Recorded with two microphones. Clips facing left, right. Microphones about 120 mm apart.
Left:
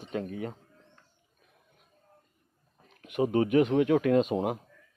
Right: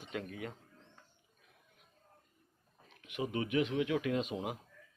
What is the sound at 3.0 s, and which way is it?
Speech, 45° left (ahead or behind).